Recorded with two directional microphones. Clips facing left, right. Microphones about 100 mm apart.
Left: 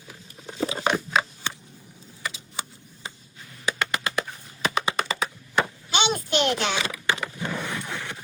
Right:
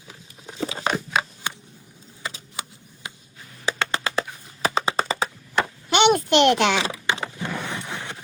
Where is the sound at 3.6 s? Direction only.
30° right (ahead or behind).